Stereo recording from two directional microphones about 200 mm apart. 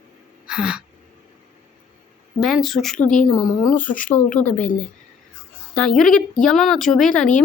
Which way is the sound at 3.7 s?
40° left (ahead or behind).